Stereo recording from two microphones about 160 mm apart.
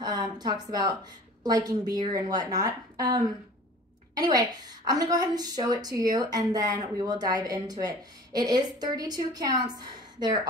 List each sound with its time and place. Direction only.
0.0 s a woman's voice: 25° right (ahead or behind)